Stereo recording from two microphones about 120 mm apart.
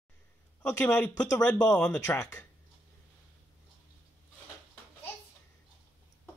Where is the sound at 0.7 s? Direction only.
10° left (ahead or behind).